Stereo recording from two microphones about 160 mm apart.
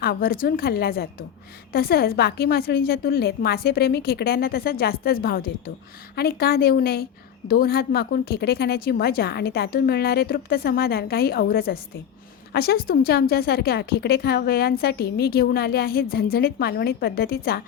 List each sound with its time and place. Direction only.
0.0 s a woman's voice: 70° left (ahead or behind)